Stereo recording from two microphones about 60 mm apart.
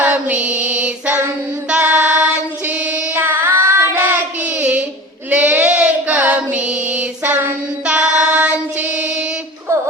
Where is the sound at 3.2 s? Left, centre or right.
Right.